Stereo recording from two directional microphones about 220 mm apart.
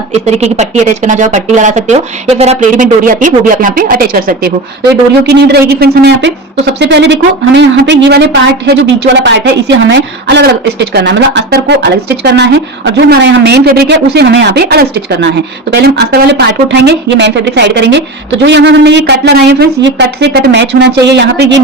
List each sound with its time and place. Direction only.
0.3 s speech: 30° right (ahead or behind); by 21.6 s 50° right (ahead or behind)